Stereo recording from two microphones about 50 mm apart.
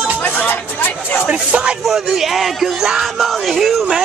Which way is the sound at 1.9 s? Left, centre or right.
Centre.